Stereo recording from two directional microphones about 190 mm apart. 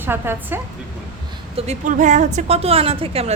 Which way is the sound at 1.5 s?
40° right (ahead or behind).